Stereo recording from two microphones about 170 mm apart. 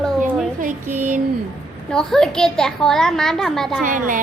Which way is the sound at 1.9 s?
5° left (ahead or behind).